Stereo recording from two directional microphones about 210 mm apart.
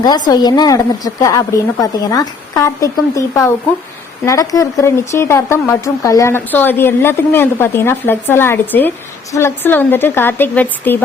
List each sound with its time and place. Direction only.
0.0 s speech: 20° left (ahead or behind)